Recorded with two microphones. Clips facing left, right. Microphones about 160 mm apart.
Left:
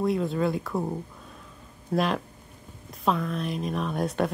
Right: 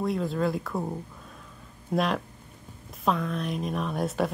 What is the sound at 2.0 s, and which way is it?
Speech, centre (ahead or behind).